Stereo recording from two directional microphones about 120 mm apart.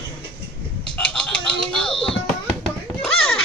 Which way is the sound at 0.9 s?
10° left (ahead or behind).